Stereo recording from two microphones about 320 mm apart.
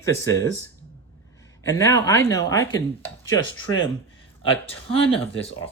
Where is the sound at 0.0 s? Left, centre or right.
Centre.